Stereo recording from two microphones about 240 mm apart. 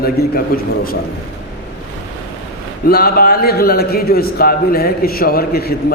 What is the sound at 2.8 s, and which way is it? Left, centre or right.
A man's voice, left.